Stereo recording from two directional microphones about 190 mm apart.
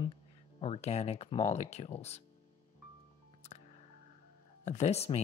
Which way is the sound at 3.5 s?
35° left (ahead or behind).